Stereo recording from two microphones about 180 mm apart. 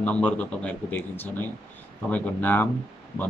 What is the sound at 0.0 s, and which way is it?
A man's voice, 5° left (ahead or behind).